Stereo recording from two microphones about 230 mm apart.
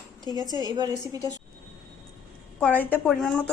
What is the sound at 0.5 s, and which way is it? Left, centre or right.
Speech, centre.